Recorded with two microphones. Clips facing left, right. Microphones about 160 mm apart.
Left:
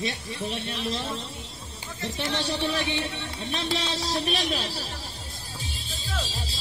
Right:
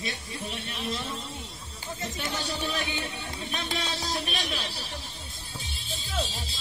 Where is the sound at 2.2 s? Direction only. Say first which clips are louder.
Left 6 dB; 30° left (ahead or behind).